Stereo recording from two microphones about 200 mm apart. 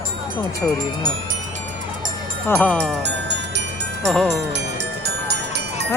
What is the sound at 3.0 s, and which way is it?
Music, 60° right (ahead or behind).